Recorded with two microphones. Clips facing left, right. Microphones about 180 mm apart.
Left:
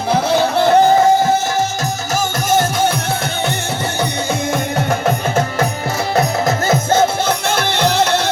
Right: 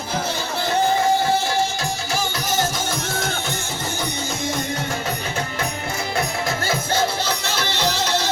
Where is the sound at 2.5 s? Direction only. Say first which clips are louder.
Left 10 dB; 60° left (ahead or behind).